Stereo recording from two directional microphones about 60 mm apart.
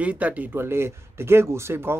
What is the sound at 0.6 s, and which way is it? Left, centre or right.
Speech, right.